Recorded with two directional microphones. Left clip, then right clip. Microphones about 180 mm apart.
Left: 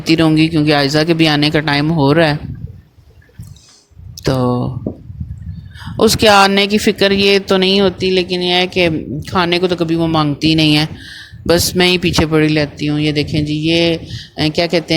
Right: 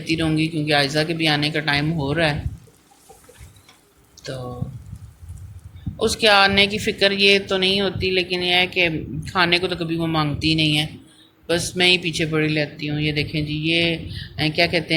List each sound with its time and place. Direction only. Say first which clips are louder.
0.0 s speech: left 10 dB; 60° left (ahead or behind)
4.2 s a sound: left 15 dB; 55° left (ahead or behind)
6.0 s speech: left 7 dB; 60° left (ahead or behind)